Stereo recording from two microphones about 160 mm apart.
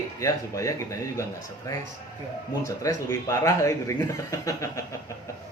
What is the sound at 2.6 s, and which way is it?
Speech, 20° left (ahead or behind).